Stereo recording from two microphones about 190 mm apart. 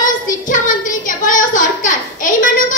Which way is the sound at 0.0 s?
45° left (ahead or behind).